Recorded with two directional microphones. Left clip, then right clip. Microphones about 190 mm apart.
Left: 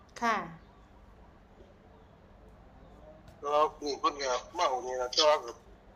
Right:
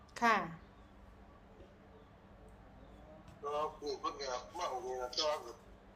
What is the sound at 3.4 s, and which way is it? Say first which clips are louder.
A man's voice: left 10 dB; 65° left (ahead or behind).